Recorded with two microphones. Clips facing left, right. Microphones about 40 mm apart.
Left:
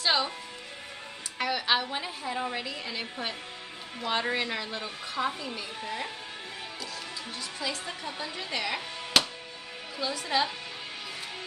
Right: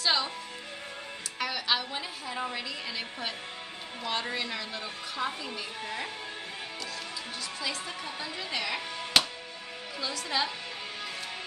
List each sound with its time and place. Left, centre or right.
0.0 s speech: centre
1.4 s a woman's voice: centre
2.3 s speech: centre
4.1 s a woman's voice: centre
5.4 s speech: centre
7.6 s speech: centre
9.9 s a woman's voice: centre
10.2 s a woman's voice: centre